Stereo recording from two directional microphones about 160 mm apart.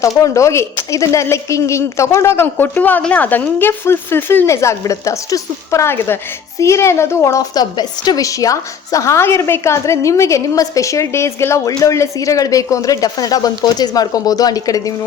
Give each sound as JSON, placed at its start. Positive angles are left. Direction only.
{"t": 0.2, "sound": "a woman's voice", "side_deg": 20}